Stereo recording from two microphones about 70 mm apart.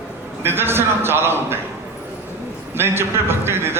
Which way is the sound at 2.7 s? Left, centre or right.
Right.